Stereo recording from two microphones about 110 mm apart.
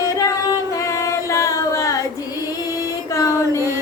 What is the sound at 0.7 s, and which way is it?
Female singing, 30° left (ahead or behind).